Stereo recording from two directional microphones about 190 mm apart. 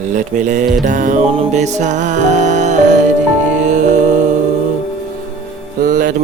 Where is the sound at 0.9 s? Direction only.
45° right (ahead or behind).